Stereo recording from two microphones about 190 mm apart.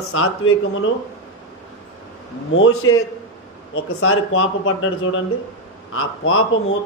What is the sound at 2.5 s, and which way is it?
A man's voice, 90° left.